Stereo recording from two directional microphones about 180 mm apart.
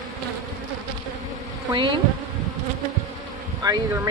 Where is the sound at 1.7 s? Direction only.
25° right (ahead or behind).